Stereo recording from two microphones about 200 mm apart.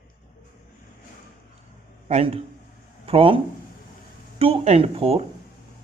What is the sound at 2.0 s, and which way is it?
A man's voice, 35° right (ahead or behind).